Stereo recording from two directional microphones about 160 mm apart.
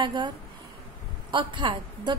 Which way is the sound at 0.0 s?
30° right (ahead or behind).